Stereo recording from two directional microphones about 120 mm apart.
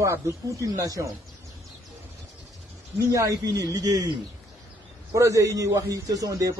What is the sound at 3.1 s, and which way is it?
A man's voice, 30° right (ahead or behind).